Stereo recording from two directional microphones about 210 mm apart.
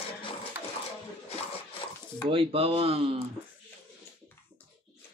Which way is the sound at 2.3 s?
25° right (ahead or behind).